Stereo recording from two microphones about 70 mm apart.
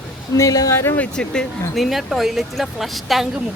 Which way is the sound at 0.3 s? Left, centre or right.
Left.